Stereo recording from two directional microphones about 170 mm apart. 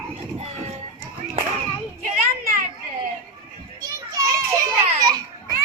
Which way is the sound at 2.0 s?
55° right (ahead or behind).